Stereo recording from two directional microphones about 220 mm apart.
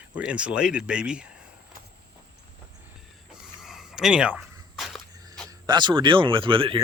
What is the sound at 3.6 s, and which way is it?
Walk, centre (ahead or behind).